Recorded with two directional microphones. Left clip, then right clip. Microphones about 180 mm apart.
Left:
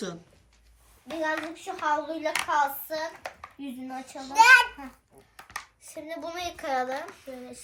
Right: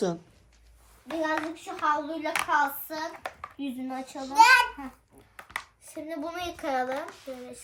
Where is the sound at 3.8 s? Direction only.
15° left (ahead or behind).